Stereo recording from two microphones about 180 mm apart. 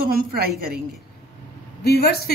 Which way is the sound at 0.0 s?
55° right (ahead or behind).